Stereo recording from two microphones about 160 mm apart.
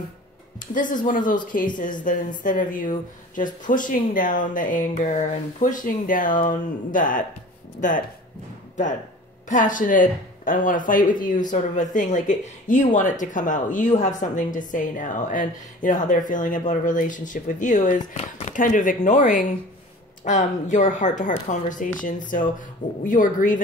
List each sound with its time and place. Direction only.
0.6 s speech: 55° left (ahead or behind)
9.5 s speech: 55° left (ahead or behind)